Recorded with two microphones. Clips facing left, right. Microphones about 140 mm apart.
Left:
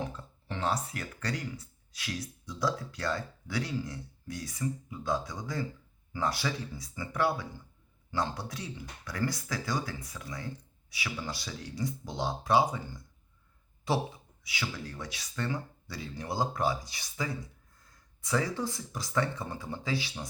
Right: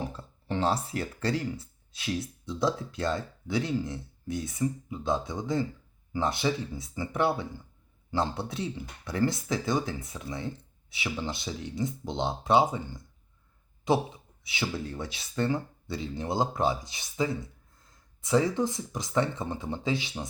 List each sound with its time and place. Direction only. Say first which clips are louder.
0.0 s speech: right 1 dB; 30° right (ahead or behind)
13.8 s speech: right 5 dB; 20° right (ahead or behind)